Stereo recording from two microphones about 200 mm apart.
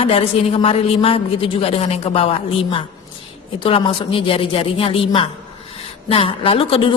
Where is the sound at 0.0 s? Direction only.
30° left (ahead or behind).